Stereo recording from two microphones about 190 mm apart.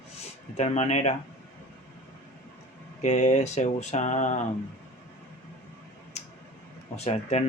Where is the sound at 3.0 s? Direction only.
40° left (ahead or behind).